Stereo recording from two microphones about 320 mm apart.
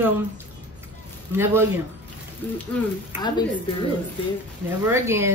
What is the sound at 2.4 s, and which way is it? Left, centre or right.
Speech, centre.